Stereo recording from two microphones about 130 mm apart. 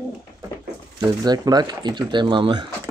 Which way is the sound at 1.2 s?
30° right (ahead or behind).